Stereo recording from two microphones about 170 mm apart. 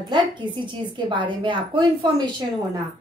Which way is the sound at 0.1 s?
30° right (ahead or behind).